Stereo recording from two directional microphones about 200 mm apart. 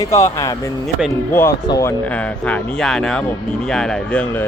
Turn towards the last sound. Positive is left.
turn(degrees=10)  # may be behind; listen again after turning